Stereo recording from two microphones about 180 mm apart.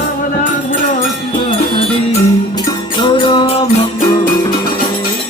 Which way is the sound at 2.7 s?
25° left (ahead or behind).